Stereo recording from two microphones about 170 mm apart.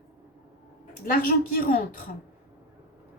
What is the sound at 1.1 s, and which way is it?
Speech, 55° left (ahead or behind).